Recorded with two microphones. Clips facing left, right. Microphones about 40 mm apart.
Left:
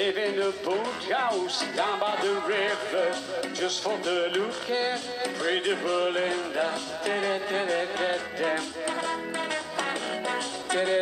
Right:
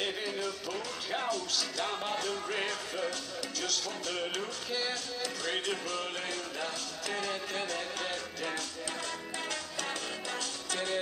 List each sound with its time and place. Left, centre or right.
0.0 s music: left